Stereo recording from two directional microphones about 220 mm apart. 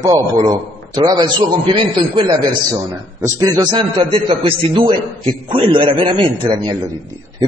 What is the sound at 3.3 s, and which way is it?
A man's voice, 20° right (ahead or behind).